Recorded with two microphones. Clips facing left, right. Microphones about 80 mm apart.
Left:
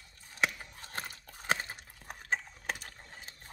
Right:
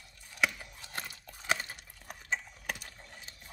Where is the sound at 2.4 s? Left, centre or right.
Left.